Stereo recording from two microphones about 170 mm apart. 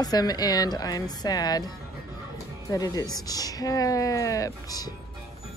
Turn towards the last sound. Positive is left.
turn(degrees=20)  # may be behind; listen again after turning